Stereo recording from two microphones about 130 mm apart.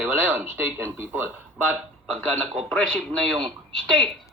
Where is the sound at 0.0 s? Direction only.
15° right (ahead or behind).